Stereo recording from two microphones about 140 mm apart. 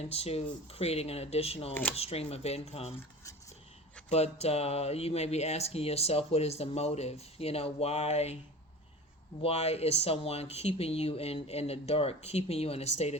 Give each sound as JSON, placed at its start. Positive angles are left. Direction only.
{"t": 0.1, "sound": "speech", "side_deg": 45}
{"t": 4.1, "sound": "speech", "side_deg": 50}
{"t": 9.4, "sound": "speech", "side_deg": 50}